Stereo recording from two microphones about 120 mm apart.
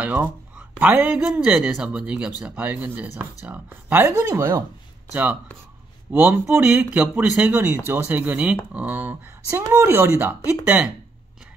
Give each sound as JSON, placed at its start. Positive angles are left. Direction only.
{"t": 0.0, "sound": "speech", "side_deg": -10}
{"t": 5.1, "sound": "speech", "side_deg": -15}